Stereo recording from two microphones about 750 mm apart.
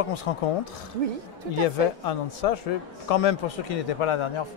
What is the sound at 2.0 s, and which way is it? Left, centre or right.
A man's voice, left.